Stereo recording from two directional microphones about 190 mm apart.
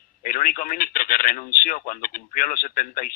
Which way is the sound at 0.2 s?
45° left (ahead or behind).